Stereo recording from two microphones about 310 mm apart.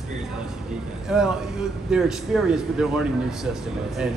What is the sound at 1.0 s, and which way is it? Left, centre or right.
A man's voice, centre.